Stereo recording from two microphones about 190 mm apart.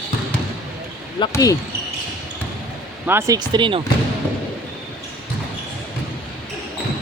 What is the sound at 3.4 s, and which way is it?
Speech, 25° right (ahead or behind).